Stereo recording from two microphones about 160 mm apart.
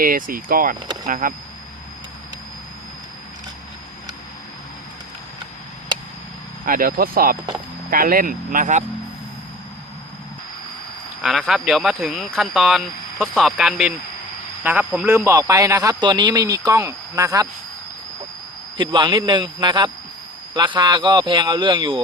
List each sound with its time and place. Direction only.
0.0 s speech: 60° right (ahead or behind)
6.7 s speech: 60° right (ahead or behind)
11.2 s speech: centre (ahead or behind); by 17.5 s 20° right (ahead or behind)
18.8 s speech: 30° right (ahead or behind)